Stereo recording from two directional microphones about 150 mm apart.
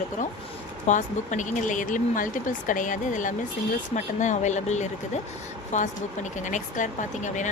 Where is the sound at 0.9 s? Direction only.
55° left (ahead or behind).